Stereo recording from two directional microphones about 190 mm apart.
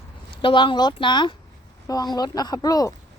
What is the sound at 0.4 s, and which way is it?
Speech, 25° left (ahead or behind).